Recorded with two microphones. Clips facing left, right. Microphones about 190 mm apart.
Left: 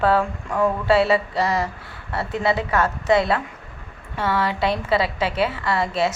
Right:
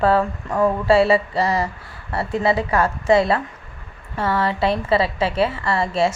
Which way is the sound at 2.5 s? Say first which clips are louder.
Right 2 dB; 35° right (ahead or behind).